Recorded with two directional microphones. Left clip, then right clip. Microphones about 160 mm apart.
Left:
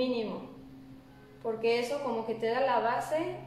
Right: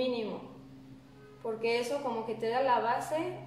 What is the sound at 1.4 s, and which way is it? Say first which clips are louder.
A woman's voice: left 2 dB; 25° right (ahead or behind).